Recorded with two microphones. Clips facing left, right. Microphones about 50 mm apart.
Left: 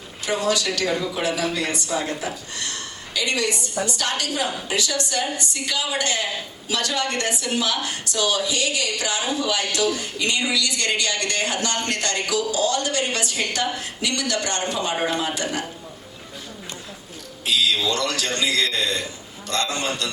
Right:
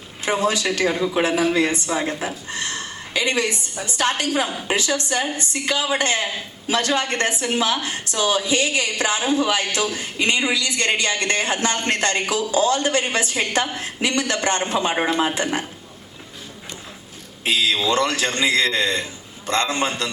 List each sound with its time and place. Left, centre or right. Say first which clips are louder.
0.3 s a woman's voice: right 2 dB; right
17.4 s a woman's voice: right 1 dB; right